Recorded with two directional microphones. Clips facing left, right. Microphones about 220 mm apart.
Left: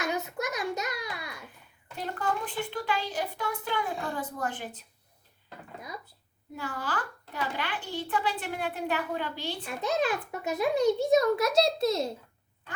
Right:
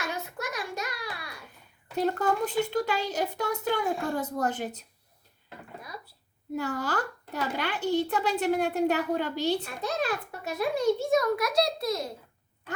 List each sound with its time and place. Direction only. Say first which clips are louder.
0.0 s a sound: left 3 dB; 20° left (ahead or behind)
2.0 s a child's voice: right 6 dB; 45° right (ahead or behind)
6.6 s a child's voice: right 4 dB; 45° right (ahead or behind)
10.0 s a child's voice: left 2 dB; 20° left (ahead or behind)